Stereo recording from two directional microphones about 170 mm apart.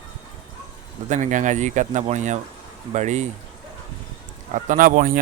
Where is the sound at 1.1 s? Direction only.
45° right (ahead or behind).